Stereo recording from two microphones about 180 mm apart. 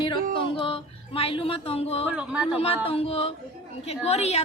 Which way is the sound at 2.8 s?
35° left (ahead or behind).